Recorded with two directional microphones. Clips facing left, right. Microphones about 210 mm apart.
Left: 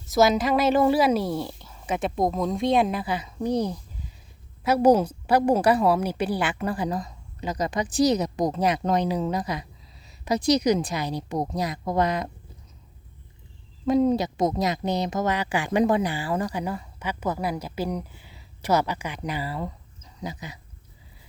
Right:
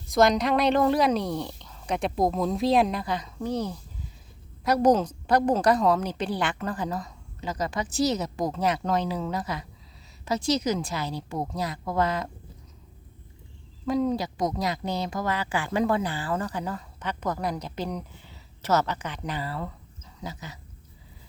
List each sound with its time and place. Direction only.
0.0 s a woman's voice: 5° left (ahead or behind)
13.8 s a woman's voice: 20° left (ahead or behind)